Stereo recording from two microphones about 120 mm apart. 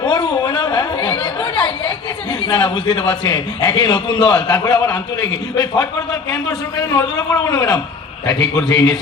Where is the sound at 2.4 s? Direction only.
40° left (ahead or behind).